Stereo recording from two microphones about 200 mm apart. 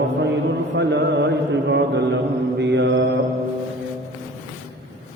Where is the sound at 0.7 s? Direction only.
60° right (ahead or behind).